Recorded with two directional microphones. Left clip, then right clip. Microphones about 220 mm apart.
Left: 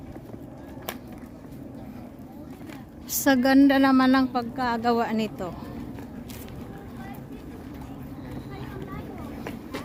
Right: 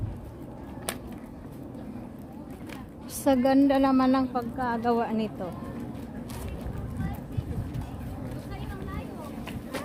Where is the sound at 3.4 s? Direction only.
10° left (ahead or behind).